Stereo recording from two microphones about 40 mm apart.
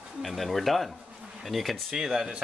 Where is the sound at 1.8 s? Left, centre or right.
Centre.